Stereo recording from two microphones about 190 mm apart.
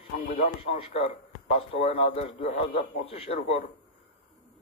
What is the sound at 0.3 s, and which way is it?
A man's voice, 30° left (ahead or behind).